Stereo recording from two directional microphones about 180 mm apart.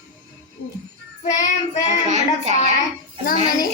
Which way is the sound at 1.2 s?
40° left (ahead or behind).